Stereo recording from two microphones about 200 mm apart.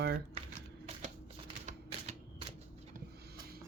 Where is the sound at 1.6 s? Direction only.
35° right (ahead or behind).